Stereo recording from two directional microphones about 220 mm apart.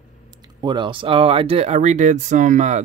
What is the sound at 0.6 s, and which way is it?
Speech, 20° right (ahead or behind).